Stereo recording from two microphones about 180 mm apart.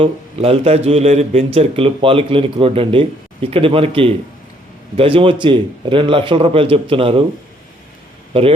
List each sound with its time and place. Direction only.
0.0 s a man's voice: 30° right (ahead or behind)
8.3 s speech: 30° right (ahead or behind)